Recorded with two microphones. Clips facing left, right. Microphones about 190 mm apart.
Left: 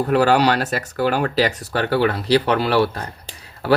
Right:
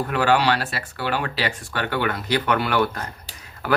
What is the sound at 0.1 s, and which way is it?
Speech, 40° left (ahead or behind).